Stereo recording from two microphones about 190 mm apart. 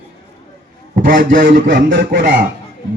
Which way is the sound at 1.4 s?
70° right (ahead or behind).